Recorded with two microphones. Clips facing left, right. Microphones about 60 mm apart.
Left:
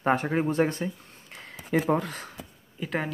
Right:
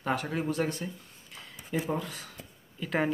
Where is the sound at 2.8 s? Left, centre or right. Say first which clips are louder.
Left 3 dB; centre.